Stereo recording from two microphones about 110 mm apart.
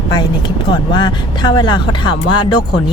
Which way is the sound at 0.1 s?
45° left (ahead or behind).